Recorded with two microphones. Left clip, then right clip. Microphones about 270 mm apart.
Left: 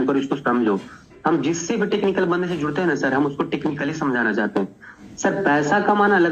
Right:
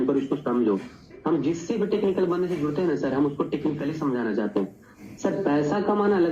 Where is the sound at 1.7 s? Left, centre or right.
Left.